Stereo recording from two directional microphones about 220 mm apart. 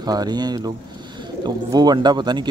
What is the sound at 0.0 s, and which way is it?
Speech, 20° right (ahead or behind).